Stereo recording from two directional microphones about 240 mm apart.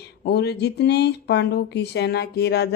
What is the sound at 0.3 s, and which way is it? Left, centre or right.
Speech, left.